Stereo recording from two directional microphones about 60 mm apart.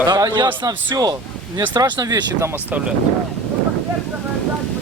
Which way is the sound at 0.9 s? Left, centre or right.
Right.